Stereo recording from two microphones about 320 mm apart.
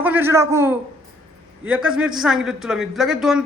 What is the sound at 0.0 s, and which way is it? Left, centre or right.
A man's voice, centre.